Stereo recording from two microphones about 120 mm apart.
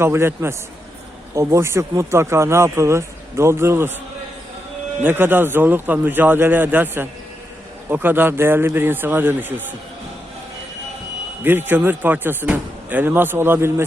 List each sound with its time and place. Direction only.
0.0 s speech: 20° right (ahead or behind)
5.0 s speech: 15° right (ahead or behind)
11.4 s speech: 15° right (ahead or behind)